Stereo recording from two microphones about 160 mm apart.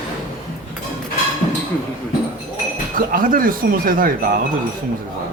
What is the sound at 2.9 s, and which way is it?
Speech, 60° right (ahead or behind).